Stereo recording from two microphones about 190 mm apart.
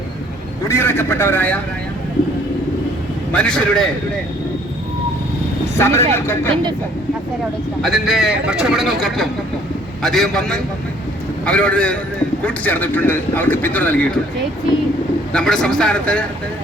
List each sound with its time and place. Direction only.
0.7 s a man's voice: 15° left (ahead or behind)
3.3 s speech: 5° left (ahead or behind)
5.7 s a man's voice: 15° left (ahead or behind)
7.8 s a man's voice: centre (ahead or behind)
15.3 s speech: 5° left (ahead or behind)